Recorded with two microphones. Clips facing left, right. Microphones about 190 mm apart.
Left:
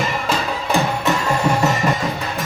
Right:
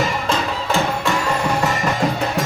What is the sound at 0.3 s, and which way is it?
Music, 15° left (ahead or behind).